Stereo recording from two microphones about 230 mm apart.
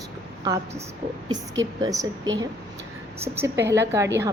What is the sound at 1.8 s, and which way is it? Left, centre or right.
Speech, centre.